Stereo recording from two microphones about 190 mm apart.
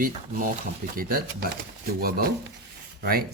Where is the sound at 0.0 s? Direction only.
45° right (ahead or behind).